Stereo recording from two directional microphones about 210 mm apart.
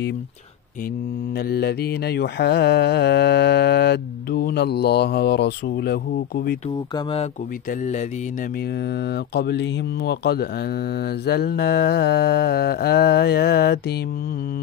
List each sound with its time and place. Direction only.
1.4 s mantra: 50° left (ahead or behind)
9.0 s mantra: 50° left (ahead or behind)